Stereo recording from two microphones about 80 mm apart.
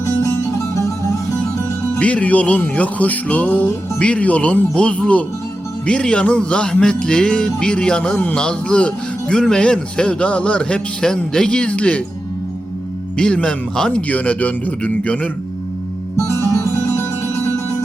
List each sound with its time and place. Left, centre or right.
0.0 s music: left
2.0 s speech: centre
13.1 s speech: centre
16.2 s music: left